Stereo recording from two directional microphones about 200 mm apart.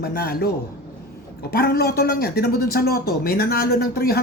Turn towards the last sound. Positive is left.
turn(degrees=50)  # may be behind; listen again after turning